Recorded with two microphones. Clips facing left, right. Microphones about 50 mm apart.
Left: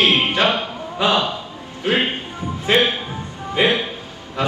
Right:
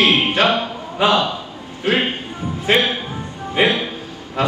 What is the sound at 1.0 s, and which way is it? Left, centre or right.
Speech, right.